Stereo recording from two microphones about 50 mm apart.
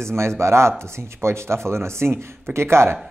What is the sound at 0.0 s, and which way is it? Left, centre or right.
A man's voice, right.